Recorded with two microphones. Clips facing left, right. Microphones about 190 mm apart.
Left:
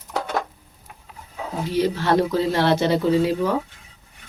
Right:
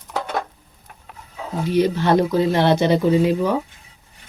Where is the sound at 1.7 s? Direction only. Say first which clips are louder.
Right 3 dB; 20° right (ahead or behind).